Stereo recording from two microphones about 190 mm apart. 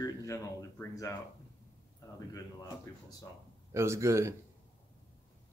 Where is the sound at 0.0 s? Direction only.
15° left (ahead or behind).